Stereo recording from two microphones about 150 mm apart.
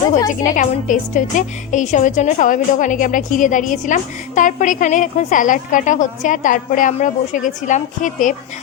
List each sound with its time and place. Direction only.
0.4 s a woman's voice: 60° left (ahead or behind)